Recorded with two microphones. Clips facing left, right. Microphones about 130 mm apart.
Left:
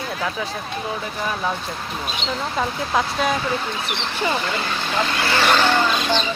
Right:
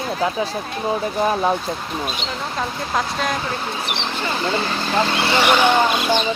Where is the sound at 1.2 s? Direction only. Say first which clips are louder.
Right 6 dB; 35° right (ahead or behind).